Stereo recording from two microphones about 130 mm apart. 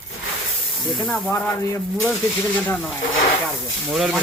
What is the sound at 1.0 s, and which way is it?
Speech, 5° left (ahead or behind).